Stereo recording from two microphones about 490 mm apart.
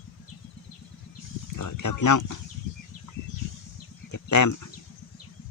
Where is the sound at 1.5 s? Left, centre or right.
Left.